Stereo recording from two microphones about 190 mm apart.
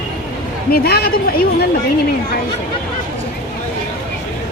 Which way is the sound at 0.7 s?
55° left (ahead or behind).